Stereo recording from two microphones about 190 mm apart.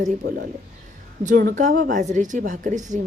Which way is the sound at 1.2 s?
45° right (ahead or behind).